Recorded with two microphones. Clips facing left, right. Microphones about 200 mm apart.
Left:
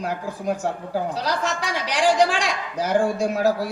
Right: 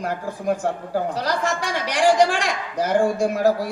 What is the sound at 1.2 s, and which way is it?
Speech, 55° right (ahead or behind).